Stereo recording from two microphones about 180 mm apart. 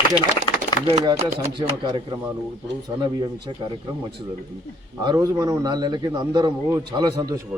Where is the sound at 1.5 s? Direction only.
25° right (ahead or behind).